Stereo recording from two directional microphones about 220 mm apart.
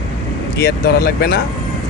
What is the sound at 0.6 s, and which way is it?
Speech, 45° left (ahead or behind).